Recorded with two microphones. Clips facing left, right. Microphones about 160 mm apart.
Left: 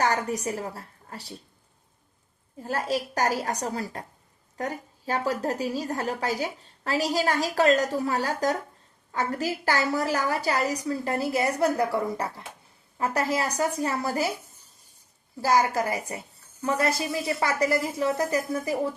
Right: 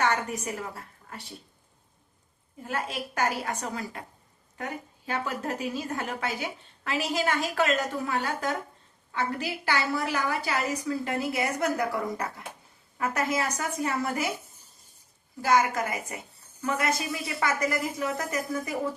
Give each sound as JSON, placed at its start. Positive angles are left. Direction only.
{"t": 0.0, "sound": "a woman's voice", "side_deg": 35}
{"t": 2.6, "sound": "a woman's voice", "side_deg": 35}
{"t": 15.4, "sound": "a woman's voice", "side_deg": 35}